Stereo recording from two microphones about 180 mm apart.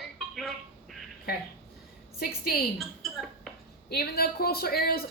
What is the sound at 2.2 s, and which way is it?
Speech, 60° left (ahead or behind).